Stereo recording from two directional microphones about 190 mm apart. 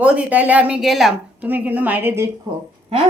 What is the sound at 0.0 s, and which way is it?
A woman's voice, 5° right (ahead or behind).